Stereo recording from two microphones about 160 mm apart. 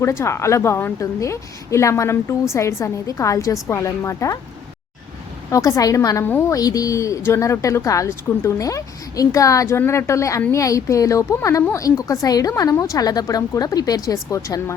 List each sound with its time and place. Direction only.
0.0 s a woman's voice: 15° left (ahead or behind)
5.5 s speech: 20° left (ahead or behind)